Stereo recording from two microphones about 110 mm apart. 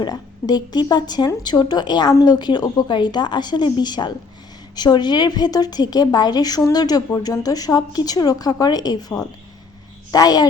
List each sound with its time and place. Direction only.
0.0 s a woman's voice: 40° left (ahead or behind)